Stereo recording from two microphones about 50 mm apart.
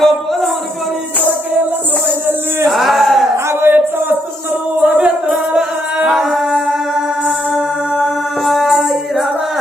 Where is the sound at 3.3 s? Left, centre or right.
Right.